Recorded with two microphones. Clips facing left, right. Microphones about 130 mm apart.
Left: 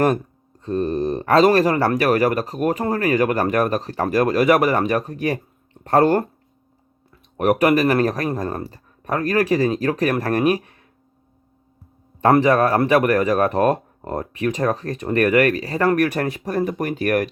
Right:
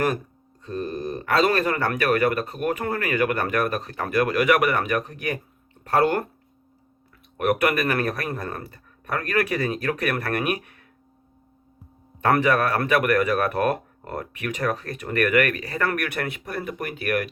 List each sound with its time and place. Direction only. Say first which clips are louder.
0.6 s speech: left 8 dB; 35° left (ahead or behind)
7.3 s speech: left 5 dB; 35° left (ahead or behind)
12.2 s speech: left 5 dB; 30° left (ahead or behind)